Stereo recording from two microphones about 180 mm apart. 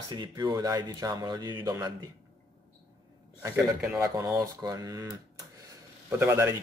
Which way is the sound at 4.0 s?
15° right (ahead or behind).